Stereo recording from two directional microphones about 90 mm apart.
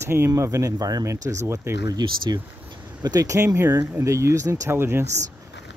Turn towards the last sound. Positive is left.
turn(degrees=-30)  # may be behind; listen again after turning